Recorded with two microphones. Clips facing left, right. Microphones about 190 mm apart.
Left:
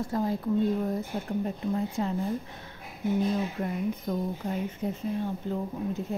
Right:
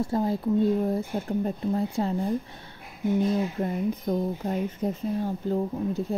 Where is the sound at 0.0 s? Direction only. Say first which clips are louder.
Right 3 dB; 30° right (ahead or behind).